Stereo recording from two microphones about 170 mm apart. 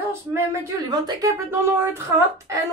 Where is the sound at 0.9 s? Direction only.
20° right (ahead or behind).